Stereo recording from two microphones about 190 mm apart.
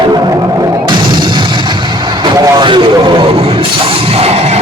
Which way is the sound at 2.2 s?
25° right (ahead or behind).